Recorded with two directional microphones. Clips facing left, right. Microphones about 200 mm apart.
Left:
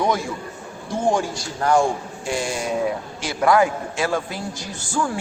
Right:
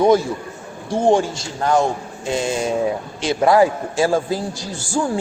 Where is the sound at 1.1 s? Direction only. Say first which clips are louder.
Right 5 dB; 25° right (ahead or behind).